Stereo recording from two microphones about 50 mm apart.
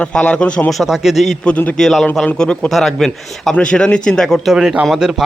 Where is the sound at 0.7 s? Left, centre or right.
Centre.